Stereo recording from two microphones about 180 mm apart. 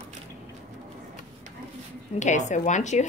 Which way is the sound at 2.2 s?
40° left (ahead or behind).